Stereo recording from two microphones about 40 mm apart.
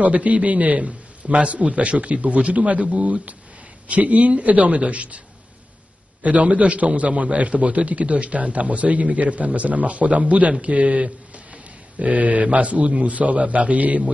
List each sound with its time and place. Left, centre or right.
0.0 s a man's voice: right
6.2 s a man's voice: right